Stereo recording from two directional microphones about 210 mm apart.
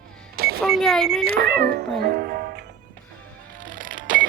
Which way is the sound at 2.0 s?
50° right (ahead or behind).